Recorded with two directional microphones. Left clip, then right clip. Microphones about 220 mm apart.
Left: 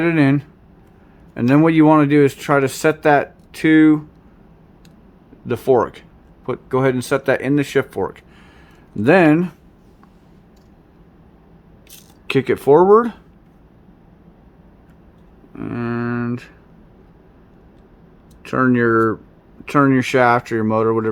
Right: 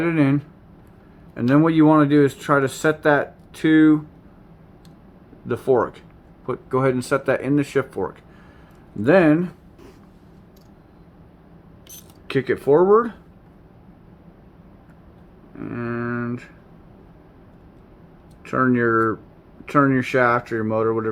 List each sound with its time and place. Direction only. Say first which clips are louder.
0.0 s speech: left 4 dB; 30° left (ahead or behind)
5.5 s speech: left 3 dB; 25° left (ahead or behind)
12.3 s speech: left 4 dB; 35° left (ahead or behind)
15.5 s speech: left 4 dB; 30° left (ahead or behind)
18.4 s speech: left 3 dB; 30° left (ahead or behind)